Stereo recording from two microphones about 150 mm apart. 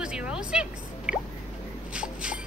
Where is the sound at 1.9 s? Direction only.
5° right (ahead or behind).